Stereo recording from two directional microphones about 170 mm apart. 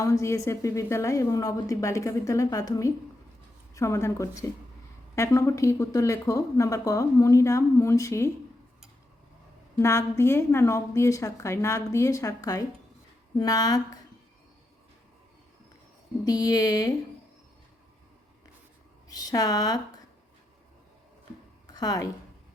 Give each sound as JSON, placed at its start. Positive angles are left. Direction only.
{"t": 0.0, "sound": "speech", "side_deg": 20}
{"t": 9.7, "sound": "speech", "side_deg": 15}
{"t": 16.2, "sound": "speech", "side_deg": 20}
{"t": 19.0, "sound": "speech", "side_deg": 20}
{"t": 21.7, "sound": "a woman's voice", "side_deg": 20}